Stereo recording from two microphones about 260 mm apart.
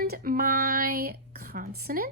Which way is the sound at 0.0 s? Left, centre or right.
Right.